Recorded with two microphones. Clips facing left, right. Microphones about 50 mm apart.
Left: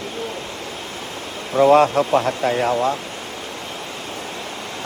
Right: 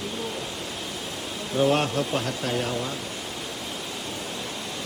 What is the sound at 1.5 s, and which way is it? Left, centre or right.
Speech, left.